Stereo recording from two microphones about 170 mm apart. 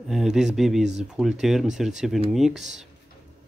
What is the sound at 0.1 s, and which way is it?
Speech, 5° right (ahead or behind).